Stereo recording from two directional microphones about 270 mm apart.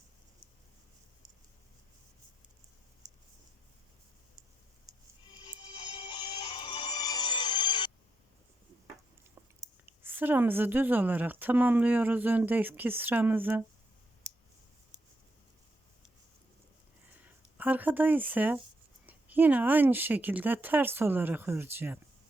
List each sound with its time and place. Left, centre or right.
5.5 s music: centre
9.6 s a woman's voice: centre
17.2 s a woman's voice: centre